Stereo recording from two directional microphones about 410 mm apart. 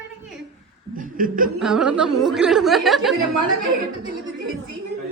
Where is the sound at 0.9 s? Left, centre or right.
Centre.